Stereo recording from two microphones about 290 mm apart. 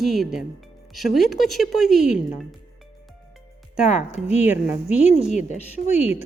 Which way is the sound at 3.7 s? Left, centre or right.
Centre.